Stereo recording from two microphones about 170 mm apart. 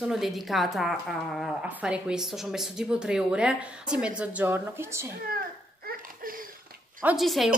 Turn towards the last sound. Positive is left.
turn(degrees=0)  # may be behind; listen again after turning